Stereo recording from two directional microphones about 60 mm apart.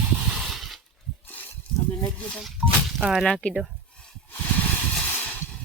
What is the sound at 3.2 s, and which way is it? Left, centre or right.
Speech, centre.